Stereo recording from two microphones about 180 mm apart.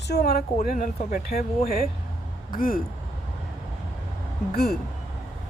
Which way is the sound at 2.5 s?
50° left (ahead or behind).